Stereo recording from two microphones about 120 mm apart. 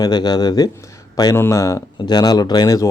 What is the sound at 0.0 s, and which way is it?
Speech, 35° left (ahead or behind).